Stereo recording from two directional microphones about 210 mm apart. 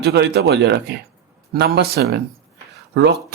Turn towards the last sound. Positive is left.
turn(degrees=-55)  # may be behind; listen again after turning